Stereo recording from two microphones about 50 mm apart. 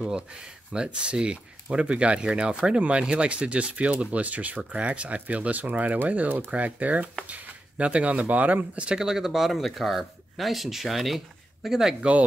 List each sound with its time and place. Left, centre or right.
0.0 s speech: centre; by 8.8 s right
8.8 s speech: centre